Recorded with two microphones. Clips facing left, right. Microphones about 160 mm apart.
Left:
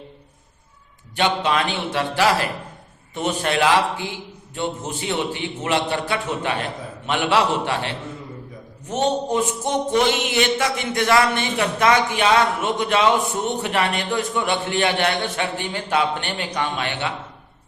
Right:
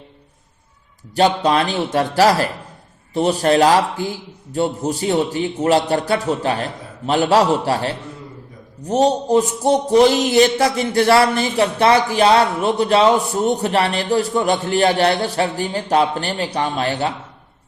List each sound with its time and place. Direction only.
1.1 s speech: 40° right (ahead or behind)